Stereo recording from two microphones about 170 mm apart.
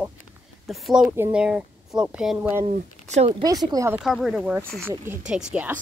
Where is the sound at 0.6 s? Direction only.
Centre (ahead or behind).